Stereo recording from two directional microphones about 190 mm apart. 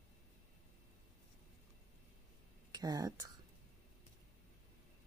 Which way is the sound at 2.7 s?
20° right (ahead or behind).